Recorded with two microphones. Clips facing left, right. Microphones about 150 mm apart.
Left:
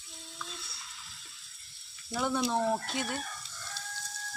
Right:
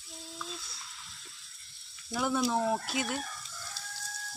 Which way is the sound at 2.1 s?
Centre (ahead or behind).